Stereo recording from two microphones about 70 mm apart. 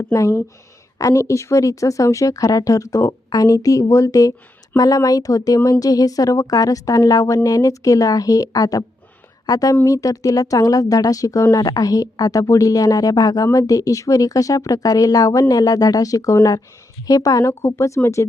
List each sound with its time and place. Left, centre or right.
0.0 s speech: left
13.5 s speech: left
17.4 s speech: left